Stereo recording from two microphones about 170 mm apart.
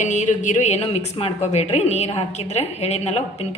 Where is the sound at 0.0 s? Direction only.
45° left (ahead or behind).